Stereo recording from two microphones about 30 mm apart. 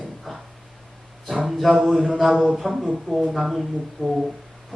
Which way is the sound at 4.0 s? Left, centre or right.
Left.